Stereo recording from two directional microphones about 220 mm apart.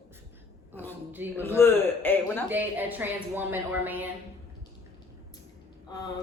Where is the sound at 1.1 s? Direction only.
10° right (ahead or behind).